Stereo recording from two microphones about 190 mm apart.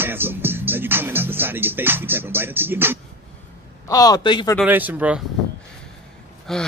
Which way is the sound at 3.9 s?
20° left (ahead or behind).